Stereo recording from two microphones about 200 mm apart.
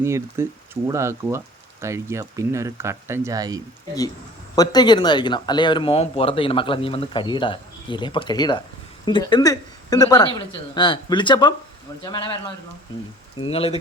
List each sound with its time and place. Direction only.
0.0 s speech: 15° right (ahead or behind)
4.5 s speech: 20° left (ahead or behind)
13.4 s speech: 30° left (ahead or behind)